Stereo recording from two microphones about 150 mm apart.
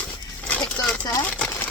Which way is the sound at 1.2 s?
10° left (ahead or behind).